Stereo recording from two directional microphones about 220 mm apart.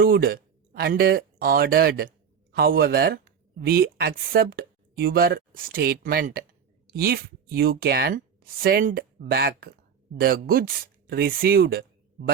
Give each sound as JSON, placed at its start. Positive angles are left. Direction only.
{"t": 0.0, "sound": "speech", "side_deg": -45}